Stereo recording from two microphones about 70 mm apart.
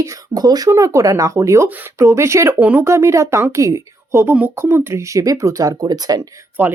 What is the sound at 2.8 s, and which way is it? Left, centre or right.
Speech, right.